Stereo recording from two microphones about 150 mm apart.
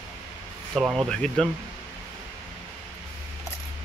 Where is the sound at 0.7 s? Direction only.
5° right (ahead or behind).